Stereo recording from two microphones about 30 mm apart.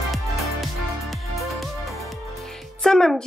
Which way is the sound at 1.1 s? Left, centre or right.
Centre.